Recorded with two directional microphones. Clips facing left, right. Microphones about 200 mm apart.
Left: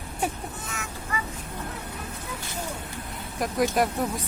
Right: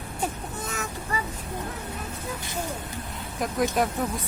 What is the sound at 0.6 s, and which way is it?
Vehicle, 40° right (ahead or behind).